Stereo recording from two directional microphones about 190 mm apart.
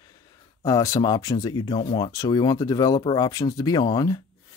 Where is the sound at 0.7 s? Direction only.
20° left (ahead or behind).